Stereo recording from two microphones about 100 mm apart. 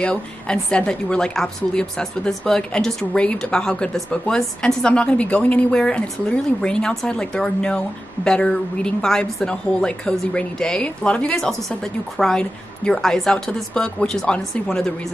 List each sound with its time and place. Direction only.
0.0 s speech: 10° left (ahead or behind)